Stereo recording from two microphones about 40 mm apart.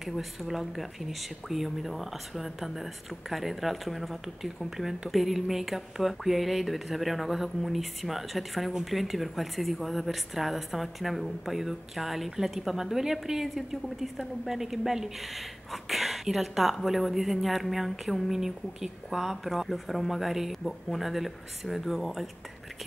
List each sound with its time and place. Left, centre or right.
0.0 s a woman's voice: centre